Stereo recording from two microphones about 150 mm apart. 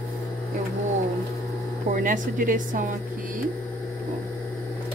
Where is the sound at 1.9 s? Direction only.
65° right (ahead or behind).